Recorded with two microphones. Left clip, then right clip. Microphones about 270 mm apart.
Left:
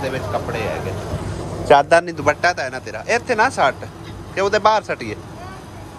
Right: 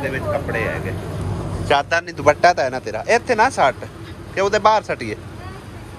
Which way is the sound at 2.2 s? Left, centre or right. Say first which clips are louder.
Right 4 dB; centre.